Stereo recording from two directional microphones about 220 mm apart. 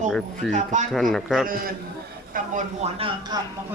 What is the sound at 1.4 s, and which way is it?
Speech, 40° right (ahead or behind).